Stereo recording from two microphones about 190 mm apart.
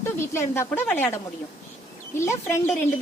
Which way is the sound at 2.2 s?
15° left (ahead or behind).